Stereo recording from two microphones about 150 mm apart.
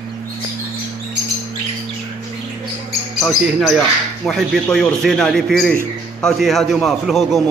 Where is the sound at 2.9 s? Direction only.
Centre (ahead or behind).